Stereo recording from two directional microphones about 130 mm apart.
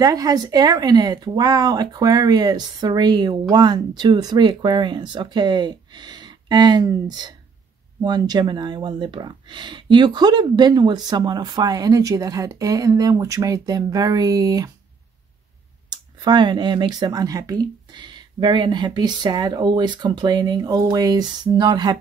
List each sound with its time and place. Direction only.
0.0 s speech: 30° right (ahead or behind)
15.9 s speech: 35° right (ahead or behind)